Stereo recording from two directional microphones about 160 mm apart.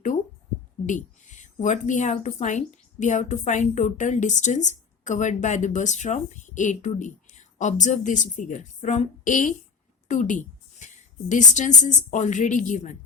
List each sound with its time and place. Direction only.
0.9 s a woman's voice: 50° left (ahead or behind)